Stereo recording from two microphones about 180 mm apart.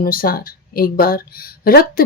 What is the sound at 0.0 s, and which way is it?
Speech, 55° left (ahead or behind).